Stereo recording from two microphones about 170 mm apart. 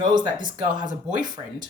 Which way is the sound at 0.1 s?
25° right (ahead or behind).